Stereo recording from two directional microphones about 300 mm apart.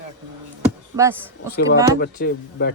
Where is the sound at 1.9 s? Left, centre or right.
Left.